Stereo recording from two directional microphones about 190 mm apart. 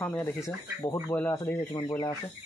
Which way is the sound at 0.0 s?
15° left (ahead or behind).